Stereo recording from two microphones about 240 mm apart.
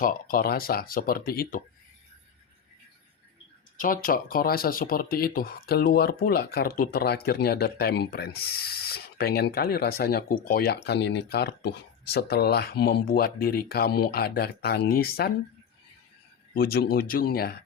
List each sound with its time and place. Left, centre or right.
0.0 s speech: left
3.8 s speech: left
16.6 s speech: left